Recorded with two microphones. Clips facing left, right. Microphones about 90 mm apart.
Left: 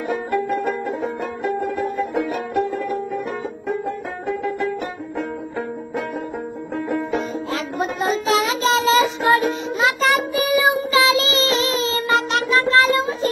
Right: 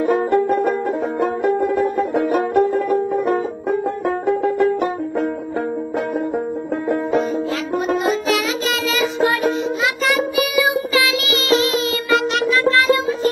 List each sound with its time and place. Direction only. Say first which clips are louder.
0.0 s music: right 6 dB; 40° right (ahead or behind)
2.0 s banjo: right 5 dB; 45° right (ahead or behind)
8.0 s music: even; 30° left (ahead or behind)